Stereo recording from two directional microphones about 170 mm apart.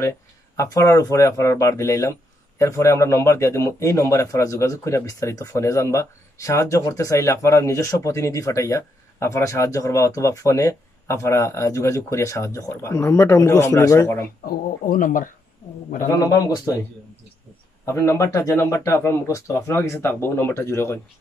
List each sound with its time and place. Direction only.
0.6 s a man's voice: 15° left (ahead or behind)
14.4 s speech: 55° left (ahead or behind)
16.1 s a man's voice: 20° left (ahead or behind)
17.8 s a man's voice: 15° left (ahead or behind)